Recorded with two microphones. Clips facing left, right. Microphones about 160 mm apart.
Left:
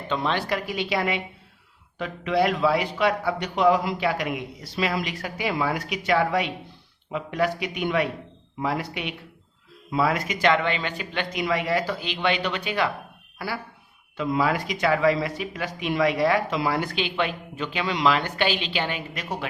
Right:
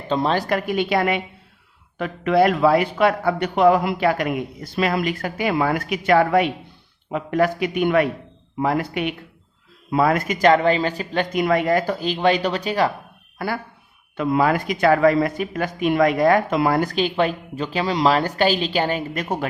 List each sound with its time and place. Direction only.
0.1 s a man's voice: 40° right (ahead or behind)
14.2 s speech: 55° right (ahead or behind)